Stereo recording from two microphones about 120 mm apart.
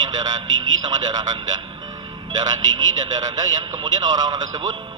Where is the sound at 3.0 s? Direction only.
35° right (ahead or behind).